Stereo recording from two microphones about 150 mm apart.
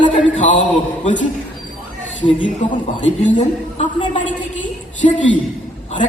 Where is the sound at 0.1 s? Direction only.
50° left (ahead or behind).